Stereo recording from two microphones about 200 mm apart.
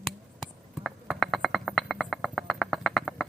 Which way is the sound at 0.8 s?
Centre (ahead or behind).